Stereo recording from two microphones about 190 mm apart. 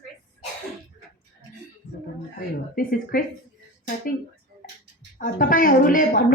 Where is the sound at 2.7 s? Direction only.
50° left (ahead or behind).